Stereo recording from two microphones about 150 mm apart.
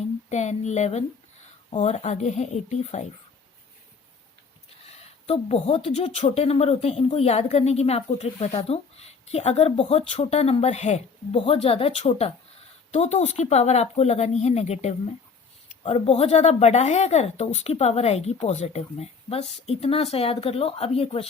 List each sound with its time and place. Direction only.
0.3 s a woman's voice: 50° left (ahead or behind)
5.2 s a woman's voice: 40° left (ahead or behind)